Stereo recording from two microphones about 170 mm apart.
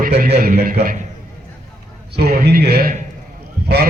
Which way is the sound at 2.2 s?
70° right (ahead or behind).